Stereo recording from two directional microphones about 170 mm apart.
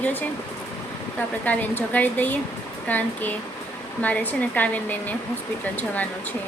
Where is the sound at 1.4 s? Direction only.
10° left (ahead or behind).